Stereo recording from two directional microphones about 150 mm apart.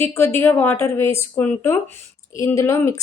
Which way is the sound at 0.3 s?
15° left (ahead or behind).